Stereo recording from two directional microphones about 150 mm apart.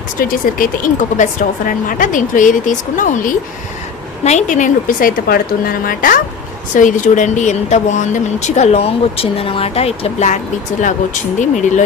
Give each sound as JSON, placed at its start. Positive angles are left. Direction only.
{"t": 0.2, "sound": "speech", "side_deg": 65}